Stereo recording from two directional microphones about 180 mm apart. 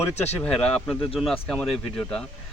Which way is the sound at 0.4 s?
5° left (ahead or behind).